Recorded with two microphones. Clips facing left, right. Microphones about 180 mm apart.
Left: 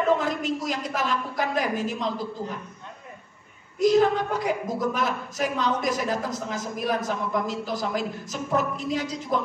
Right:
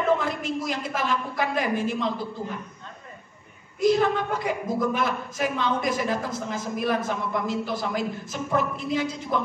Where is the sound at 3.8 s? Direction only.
40° left (ahead or behind).